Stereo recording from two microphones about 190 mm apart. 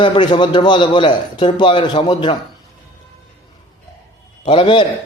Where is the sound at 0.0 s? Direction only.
25° left (ahead or behind).